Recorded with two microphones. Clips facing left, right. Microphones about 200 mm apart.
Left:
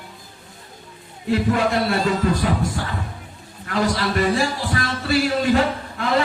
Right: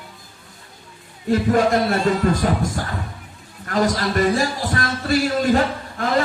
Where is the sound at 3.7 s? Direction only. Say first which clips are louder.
Right 1 dB; 45° right (ahead or behind).